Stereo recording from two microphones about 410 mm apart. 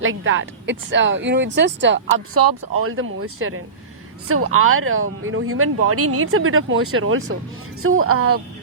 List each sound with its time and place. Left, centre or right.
0.0 s speech: right